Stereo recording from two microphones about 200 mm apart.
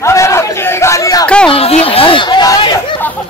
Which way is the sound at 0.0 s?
15° left (ahead or behind).